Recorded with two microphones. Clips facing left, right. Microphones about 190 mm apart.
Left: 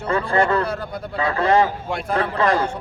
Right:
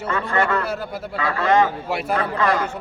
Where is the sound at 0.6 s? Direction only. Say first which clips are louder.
Left 1 dB; 5° right (ahead or behind).